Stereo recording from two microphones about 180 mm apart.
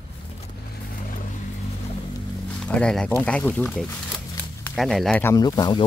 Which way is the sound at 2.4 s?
5° left (ahead or behind).